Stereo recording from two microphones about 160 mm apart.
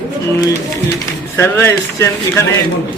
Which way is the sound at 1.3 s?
15° left (ahead or behind).